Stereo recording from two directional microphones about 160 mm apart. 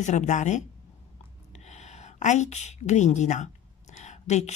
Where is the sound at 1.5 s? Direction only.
45° left (ahead or behind).